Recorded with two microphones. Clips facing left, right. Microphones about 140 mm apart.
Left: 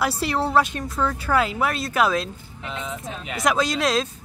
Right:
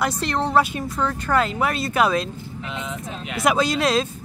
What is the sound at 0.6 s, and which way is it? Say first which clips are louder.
Speech: right 1 dB; 5° right (ahead or behind).